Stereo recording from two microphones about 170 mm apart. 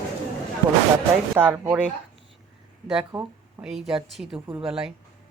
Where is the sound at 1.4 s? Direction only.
10° right (ahead or behind).